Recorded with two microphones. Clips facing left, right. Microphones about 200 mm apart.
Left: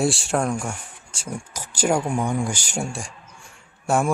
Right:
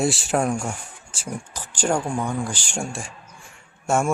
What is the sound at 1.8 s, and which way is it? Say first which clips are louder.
Speech: left 2 dB; 5° left (ahead or behind).